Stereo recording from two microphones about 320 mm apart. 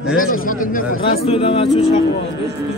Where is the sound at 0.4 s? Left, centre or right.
Left.